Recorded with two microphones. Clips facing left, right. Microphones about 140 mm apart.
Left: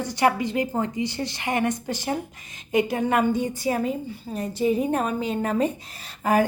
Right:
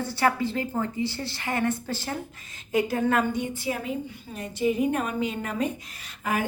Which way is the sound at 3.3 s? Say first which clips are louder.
Left 5 dB; 40° left (ahead or behind).